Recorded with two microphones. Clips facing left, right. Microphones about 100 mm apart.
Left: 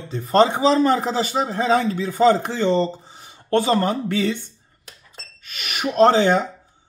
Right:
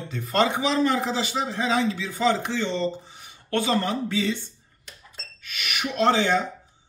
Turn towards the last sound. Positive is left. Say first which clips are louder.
# left 6 dB
turn(degrees=40)  # may be behind; listen again after turning